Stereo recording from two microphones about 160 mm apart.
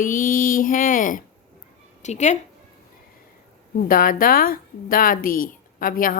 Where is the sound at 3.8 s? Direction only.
60° left (ahead or behind).